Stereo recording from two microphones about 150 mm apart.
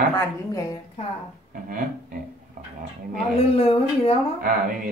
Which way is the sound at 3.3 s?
40° left (ahead or behind).